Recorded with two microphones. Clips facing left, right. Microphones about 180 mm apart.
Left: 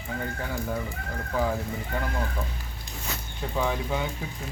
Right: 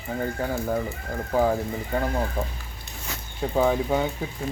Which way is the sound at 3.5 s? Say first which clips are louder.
Right 6 dB; 40° right (ahead or behind).